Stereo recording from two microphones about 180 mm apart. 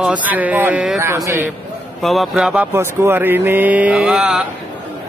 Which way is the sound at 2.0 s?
Centre (ahead or behind).